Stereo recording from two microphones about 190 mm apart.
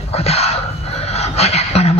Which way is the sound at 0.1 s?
35° left (ahead or behind).